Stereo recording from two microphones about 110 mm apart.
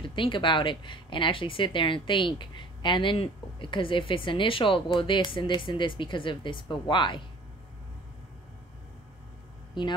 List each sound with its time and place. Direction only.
0.0 s speech: 50° left (ahead or behind)